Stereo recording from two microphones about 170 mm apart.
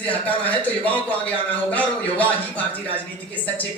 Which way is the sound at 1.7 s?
10° left (ahead or behind).